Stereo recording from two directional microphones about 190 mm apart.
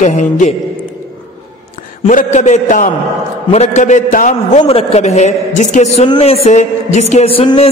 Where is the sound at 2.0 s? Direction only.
40° left (ahead or behind).